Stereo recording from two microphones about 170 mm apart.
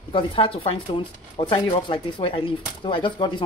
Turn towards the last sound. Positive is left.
turn(degrees=30)  # may be behind; listen again after turning